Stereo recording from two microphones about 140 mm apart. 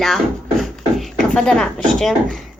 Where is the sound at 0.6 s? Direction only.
Centre (ahead or behind).